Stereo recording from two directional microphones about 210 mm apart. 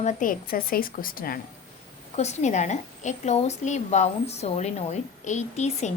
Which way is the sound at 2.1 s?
30° left (ahead or behind).